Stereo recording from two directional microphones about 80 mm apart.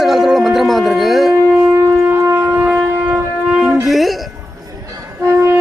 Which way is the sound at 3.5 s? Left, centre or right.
Centre.